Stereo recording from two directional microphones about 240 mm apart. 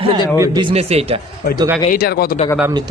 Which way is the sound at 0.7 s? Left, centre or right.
Right.